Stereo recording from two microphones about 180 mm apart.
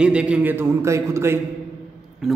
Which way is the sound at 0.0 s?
5° right (ahead or behind).